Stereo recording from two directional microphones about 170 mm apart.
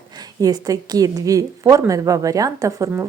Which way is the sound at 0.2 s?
20° right (ahead or behind).